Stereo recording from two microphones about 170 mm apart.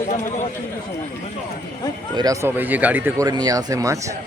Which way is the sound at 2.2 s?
15° right (ahead or behind).